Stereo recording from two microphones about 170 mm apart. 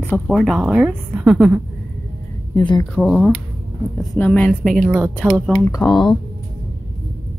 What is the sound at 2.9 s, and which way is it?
A woman's voice, 5° left (ahead or behind).